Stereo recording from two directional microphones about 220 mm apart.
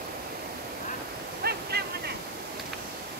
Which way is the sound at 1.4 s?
45° right (ahead or behind).